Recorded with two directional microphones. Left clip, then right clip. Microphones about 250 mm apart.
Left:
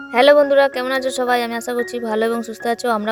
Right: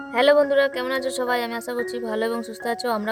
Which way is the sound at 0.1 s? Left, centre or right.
Centre.